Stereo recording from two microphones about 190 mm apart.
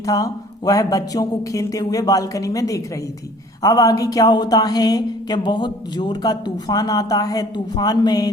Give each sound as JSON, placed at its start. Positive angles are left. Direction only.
{"t": 0.0, "sound": "a woman's voice", "side_deg": 15}